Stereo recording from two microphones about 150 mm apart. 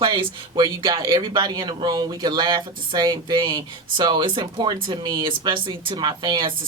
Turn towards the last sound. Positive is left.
turn(degrees=-30)  # may be behind; listen again after turning